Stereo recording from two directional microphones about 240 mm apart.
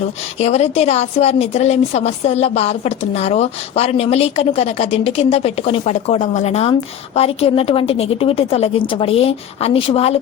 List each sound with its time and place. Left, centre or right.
0.3 s a woman's voice: left